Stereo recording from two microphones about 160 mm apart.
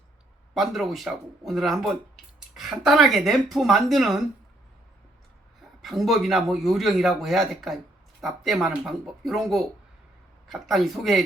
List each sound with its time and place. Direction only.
0.5 s speech: centre (ahead or behind)
5.8 s speech: centre (ahead or behind)